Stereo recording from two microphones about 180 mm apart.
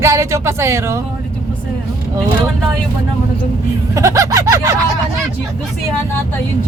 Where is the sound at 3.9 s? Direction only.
20° right (ahead or behind).